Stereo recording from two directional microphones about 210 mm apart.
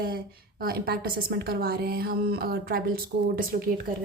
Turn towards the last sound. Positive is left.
turn(degrees=-45)  # may be behind; listen again after turning